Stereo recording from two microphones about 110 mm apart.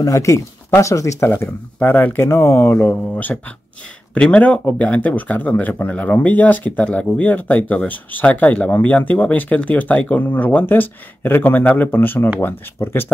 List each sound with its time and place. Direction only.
0.0 s speech: 30° left (ahead or behind)